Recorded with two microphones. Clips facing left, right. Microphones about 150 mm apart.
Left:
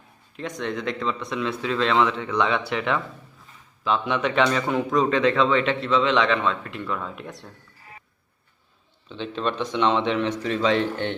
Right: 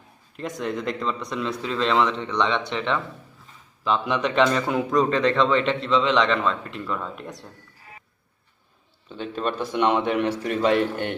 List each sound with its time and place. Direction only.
0.3 s a man's voice: centre (ahead or behind)
9.1 s speech: 45° right (ahead or behind)
9.4 s speech: 10° right (ahead or behind)